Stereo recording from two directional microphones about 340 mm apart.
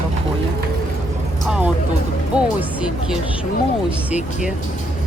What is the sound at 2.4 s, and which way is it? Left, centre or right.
Speech, centre.